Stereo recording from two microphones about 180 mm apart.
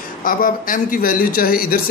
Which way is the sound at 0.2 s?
50° left (ahead or behind).